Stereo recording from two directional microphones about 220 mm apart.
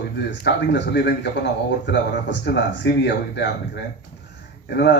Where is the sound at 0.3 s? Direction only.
50° left (ahead or behind).